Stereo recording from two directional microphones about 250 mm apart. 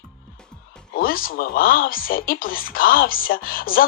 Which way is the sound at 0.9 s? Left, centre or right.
Left.